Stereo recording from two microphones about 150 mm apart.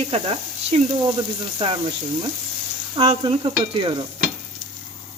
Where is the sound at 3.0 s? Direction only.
40° right (ahead or behind).